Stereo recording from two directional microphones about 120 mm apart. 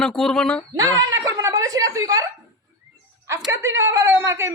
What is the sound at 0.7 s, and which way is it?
Chuckle, 30° right (ahead or behind).